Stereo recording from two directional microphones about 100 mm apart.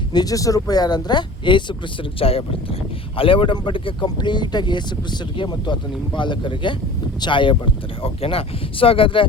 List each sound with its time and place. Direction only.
0.1 s speech: 40° left (ahead or behind)
2.1 s speech: 75° left (ahead or behind)
3.2 s speech: 60° left (ahead or behind)